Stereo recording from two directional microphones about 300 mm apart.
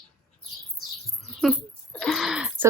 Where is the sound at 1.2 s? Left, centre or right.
Centre.